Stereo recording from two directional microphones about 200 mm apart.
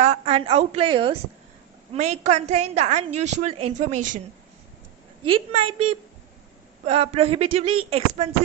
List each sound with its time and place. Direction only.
0.0 s a woman's voice: 30° right (ahead or behind)
5.2 s a woman's voice: 25° right (ahead or behind)